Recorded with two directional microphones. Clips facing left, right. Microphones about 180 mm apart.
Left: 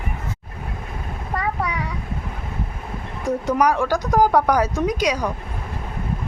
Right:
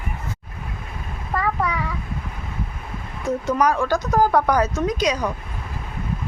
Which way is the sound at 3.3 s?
15° left (ahead or behind).